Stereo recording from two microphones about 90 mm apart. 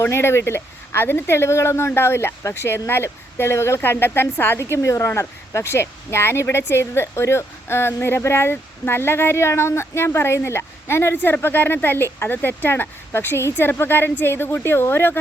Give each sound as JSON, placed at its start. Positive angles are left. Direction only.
{"t": 0.0, "sound": "speech", "side_deg": 30}